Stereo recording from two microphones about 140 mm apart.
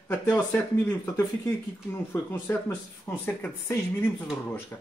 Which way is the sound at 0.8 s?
15° left (ahead or behind).